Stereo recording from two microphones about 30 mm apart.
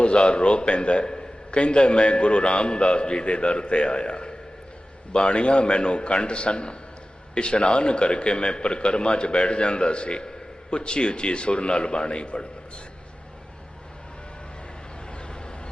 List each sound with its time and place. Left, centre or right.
0.0 s a man's voice: left
15.1 s vehicle: left